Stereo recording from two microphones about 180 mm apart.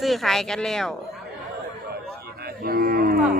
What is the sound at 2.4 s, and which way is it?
Cattle, 55° right (ahead or behind).